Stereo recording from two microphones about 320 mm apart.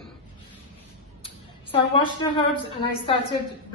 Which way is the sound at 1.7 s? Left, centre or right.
Centre.